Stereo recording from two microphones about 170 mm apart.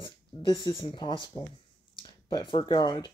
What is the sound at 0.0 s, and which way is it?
Speech, 25° left (ahead or behind).